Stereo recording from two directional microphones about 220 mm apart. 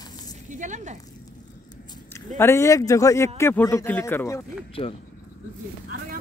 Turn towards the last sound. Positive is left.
turn(degrees=25)  # may be behind; listen again after turning